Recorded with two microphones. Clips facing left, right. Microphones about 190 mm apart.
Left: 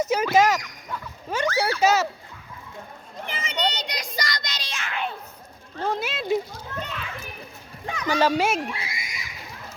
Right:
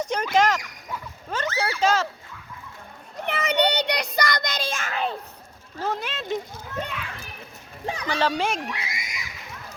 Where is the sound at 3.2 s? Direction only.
65° right (ahead or behind); by 5.1 s 40° right (ahead or behind).